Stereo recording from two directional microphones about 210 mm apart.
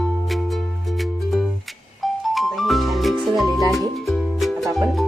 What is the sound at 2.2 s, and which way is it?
Music, centre (ahead or behind).